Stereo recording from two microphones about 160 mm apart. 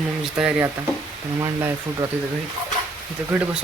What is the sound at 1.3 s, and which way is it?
Speech, 20° right (ahead or behind).